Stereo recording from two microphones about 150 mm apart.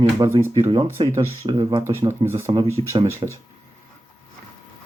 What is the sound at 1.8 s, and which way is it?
Speech, 15° right (ahead or behind).